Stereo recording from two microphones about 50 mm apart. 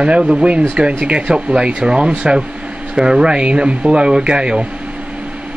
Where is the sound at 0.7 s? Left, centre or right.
Right.